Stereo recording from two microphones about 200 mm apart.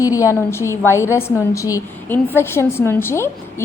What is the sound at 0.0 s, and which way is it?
A woman's voice, 15° left (ahead or behind).